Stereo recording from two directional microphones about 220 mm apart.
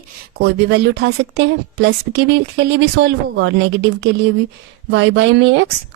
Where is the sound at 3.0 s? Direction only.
55° right (ahead or behind).